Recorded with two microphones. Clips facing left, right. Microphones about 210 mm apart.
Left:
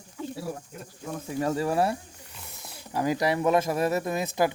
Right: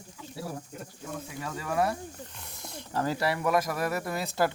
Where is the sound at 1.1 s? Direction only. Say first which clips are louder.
Left 10 dB; 40° left (ahead or behind).